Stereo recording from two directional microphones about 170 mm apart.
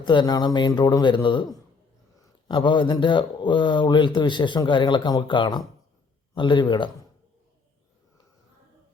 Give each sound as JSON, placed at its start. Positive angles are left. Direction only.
{"t": 0.0, "sound": "speech", "side_deg": 25}
{"t": 2.5, "sound": "speech", "side_deg": 30}